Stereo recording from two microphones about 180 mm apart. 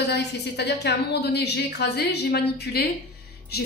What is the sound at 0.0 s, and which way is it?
A woman's voice, 70° left (ahead or behind).